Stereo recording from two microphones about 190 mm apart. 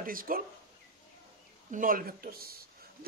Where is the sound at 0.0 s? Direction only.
50° right (ahead or behind).